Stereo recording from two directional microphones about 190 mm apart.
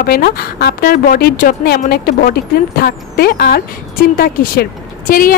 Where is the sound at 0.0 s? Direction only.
55° left (ahead or behind).